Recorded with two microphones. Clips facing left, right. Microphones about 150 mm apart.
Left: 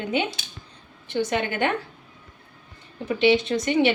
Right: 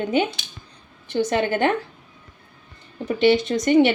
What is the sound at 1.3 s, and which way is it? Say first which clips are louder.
Speech: right 6 dB; 40° right (ahead or behind).